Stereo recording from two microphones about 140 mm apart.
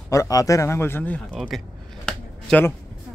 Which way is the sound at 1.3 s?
Centre (ahead or behind).